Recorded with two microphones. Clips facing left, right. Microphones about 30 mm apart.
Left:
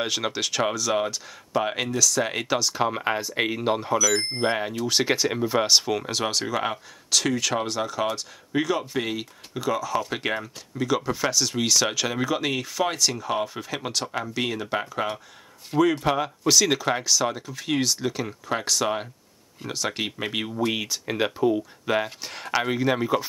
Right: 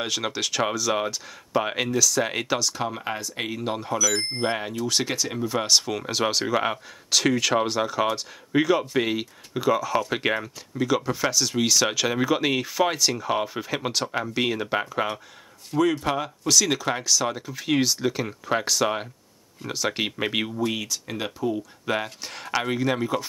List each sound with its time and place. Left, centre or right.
0.0 s speech: centre
2.7 s speech: centre
4.8 s speech: centre
5.6 s speech: centre
16.0 s speech: centre
20.7 s speech: centre
21.8 s speech: centre